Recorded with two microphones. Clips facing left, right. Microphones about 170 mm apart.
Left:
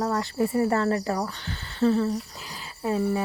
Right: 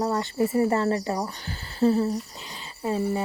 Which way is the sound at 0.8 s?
30° right (ahead or behind).